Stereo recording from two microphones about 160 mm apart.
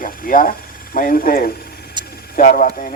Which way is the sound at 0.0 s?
60° left (ahead or behind).